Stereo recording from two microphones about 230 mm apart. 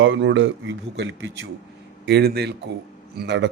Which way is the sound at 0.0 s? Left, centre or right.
Right.